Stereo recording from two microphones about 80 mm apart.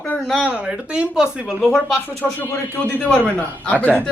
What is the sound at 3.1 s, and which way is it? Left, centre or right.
Speech, centre.